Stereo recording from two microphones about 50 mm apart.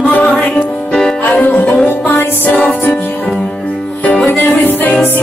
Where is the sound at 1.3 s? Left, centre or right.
Left.